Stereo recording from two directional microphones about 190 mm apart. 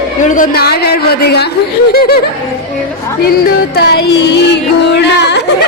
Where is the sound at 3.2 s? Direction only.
55° left (ahead or behind).